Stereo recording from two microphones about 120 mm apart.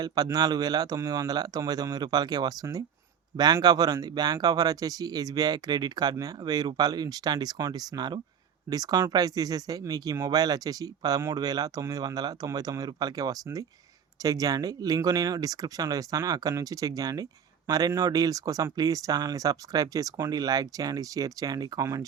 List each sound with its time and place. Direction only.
0.0 s speech: 35° right (ahead or behind)